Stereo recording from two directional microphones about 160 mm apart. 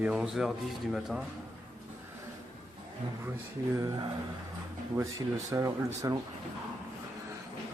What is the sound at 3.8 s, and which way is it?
Speech, 20° right (ahead or behind).